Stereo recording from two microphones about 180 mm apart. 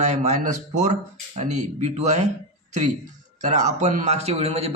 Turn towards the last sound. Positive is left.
turn(degrees=-35)  # may be behind; listen again after turning